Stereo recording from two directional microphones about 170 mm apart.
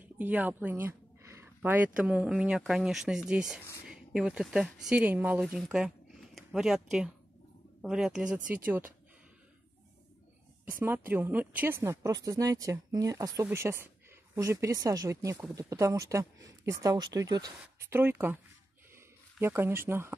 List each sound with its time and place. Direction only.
0.0 s speech: 10° right (ahead or behind)
10.8 s speech: 10° right (ahead or behind)
19.4 s speech: 15° right (ahead or behind)